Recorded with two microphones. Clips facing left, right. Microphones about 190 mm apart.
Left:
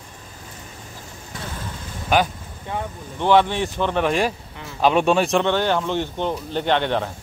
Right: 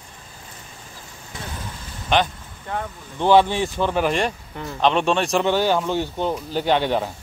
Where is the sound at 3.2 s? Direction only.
10° right (ahead or behind).